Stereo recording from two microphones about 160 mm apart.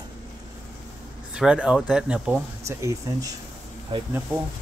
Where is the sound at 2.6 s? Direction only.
20° right (ahead or behind).